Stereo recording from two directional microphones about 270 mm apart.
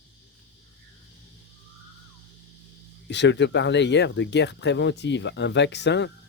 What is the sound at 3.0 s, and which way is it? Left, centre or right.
Speech, left.